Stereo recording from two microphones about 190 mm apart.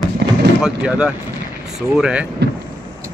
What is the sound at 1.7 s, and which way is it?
Speech, 5° right (ahead or behind).